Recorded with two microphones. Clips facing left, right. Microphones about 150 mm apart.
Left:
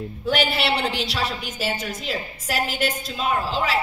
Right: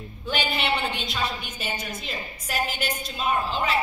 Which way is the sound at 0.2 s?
85° left.